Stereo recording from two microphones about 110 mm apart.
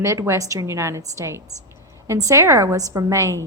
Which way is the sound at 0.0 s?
25° right (ahead or behind).